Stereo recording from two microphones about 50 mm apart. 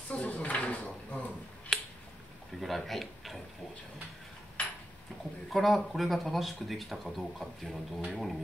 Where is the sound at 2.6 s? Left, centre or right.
Centre.